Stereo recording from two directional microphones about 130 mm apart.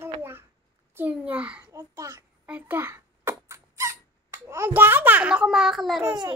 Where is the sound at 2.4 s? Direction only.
15° right (ahead or behind).